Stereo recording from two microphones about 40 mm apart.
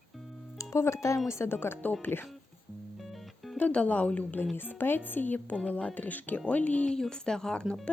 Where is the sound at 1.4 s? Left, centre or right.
Left.